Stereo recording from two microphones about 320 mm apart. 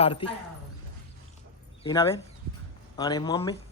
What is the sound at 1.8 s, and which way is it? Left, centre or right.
Speech, centre.